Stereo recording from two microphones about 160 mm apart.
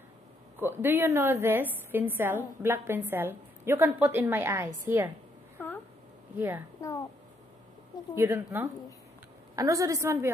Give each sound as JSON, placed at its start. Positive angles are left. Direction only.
{"t": 0.6, "sound": "a woman's voice", "side_deg": -15}
{"t": 5.6, "sound": "a sound", "side_deg": 10}
{"t": 6.8, "sound": "a woman's voice", "side_deg": 20}
{"t": 8.1, "sound": "a woman's voice", "side_deg": -15}